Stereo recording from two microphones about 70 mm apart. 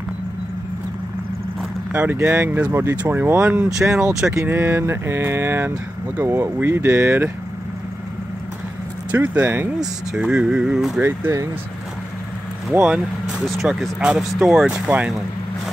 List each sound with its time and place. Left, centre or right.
1.9 s speech: right
2.7 s mantra: right
3.0 s speech: right
4.0 s speech: centre
4.5 s mantra: right
9.1 s speech: centre
11.0 s speech: right
13.4 s speech: centre
14.9 s speech: centre